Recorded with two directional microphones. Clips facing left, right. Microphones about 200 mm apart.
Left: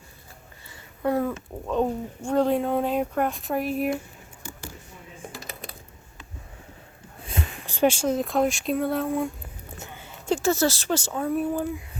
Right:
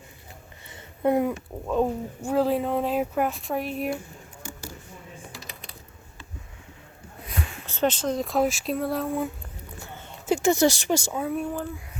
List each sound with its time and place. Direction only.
0.7 s a sound: 20° right (ahead or behind)
1.6 s speech: 5° right (ahead or behind)
5.3 s typing: 50° left (ahead or behind)
7.7 s speech: 10° left (ahead or behind)
9.7 s a sound: 20° left (ahead or behind)
10.2 s speech: 15° right (ahead or behind); by 11.5 s centre (ahead or behind)